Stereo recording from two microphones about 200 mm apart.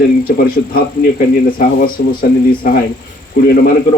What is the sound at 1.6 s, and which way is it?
A man's voice, 45° left (ahead or behind).